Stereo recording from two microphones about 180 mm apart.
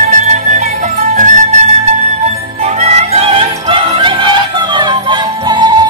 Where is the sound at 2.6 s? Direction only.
35° right (ahead or behind).